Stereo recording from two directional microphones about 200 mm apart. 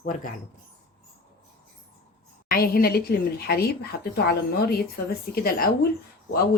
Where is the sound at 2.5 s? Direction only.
45° left (ahead or behind).